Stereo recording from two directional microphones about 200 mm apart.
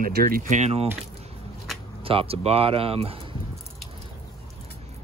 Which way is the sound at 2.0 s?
30° right (ahead or behind).